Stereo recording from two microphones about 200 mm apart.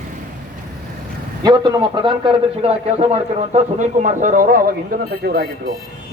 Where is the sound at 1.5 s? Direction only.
25° right (ahead or behind).